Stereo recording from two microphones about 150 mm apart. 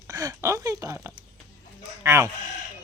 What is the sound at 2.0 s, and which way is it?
Chicken, 20° right (ahead or behind).